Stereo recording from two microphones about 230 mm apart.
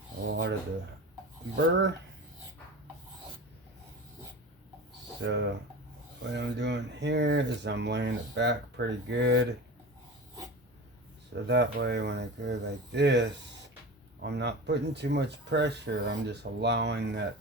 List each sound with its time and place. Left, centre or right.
0.3 s a sound: right
5.2 s speech: right
11.4 s speech: right